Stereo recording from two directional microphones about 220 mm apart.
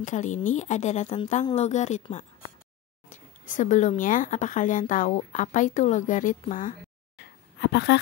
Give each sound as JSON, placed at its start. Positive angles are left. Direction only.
{"t": 0.0, "sound": "speech", "side_deg": 35}
{"t": 7.6, "sound": "speech", "side_deg": 50}